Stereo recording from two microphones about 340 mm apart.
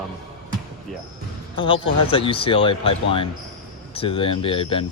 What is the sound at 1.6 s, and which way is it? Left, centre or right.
Speech, centre.